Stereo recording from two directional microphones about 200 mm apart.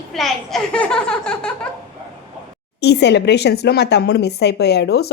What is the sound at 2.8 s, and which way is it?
A woman's voice, 55° left (ahead or behind).